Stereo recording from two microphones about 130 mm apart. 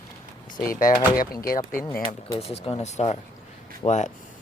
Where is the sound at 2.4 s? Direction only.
50° left (ahead or behind).